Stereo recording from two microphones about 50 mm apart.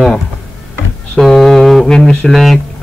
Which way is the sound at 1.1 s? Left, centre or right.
Centre.